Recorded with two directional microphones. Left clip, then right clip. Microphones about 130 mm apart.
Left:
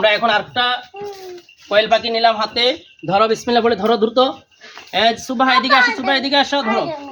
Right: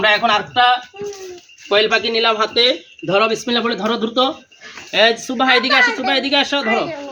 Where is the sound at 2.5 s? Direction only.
40° left (ahead or behind).